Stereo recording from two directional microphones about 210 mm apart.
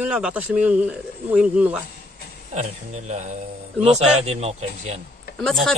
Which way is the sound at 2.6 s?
35° right (ahead or behind).